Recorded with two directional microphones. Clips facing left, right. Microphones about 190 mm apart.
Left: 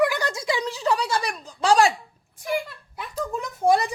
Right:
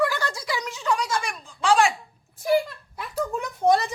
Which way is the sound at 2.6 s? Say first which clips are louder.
Even; centre (ahead or behind).